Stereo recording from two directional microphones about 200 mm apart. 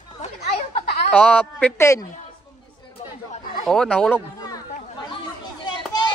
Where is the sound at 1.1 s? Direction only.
5° left (ahead or behind).